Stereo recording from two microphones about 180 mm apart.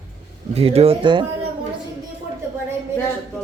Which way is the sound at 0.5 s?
35° right (ahead or behind).